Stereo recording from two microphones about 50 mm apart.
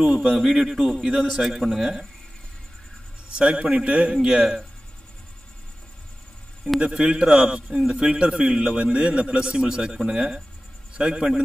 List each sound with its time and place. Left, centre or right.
0.0 s a man's voice: centre
3.3 s a man's voice: right
6.8 s a man's voice: centre